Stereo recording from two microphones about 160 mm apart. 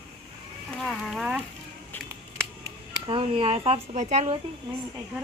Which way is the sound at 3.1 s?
35° right (ahead or behind).